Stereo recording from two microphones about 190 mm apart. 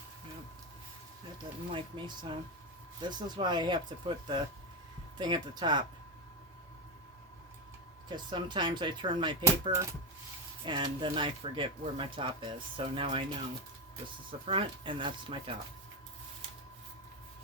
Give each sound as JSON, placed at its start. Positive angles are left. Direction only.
{"t": 1.7, "sound": "speech", "side_deg": -25}
{"t": 8.1, "sound": "speech", "side_deg": -25}
{"t": 14.3, "sound": "speech", "side_deg": -30}